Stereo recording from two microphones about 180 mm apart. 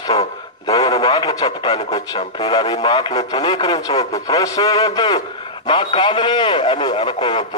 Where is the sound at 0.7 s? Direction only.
20° left (ahead or behind).